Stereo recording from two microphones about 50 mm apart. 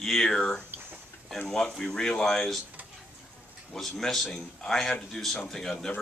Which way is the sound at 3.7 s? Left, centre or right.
Centre.